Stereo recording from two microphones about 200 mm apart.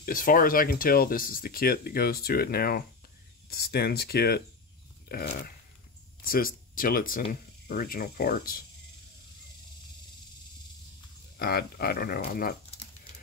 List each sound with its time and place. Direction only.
0.0 s speech: 45° left (ahead or behind)
11.3 s speech: 50° left (ahead or behind)